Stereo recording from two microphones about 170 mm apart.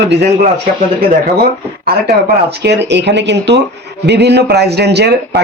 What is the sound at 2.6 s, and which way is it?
Speech, 90° right.